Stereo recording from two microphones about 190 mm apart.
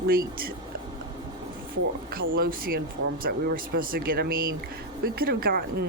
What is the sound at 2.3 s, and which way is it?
Speech, 50° right (ahead or behind).